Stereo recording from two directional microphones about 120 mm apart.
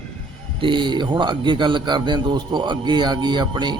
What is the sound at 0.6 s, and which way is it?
Speech, 40° right (ahead or behind).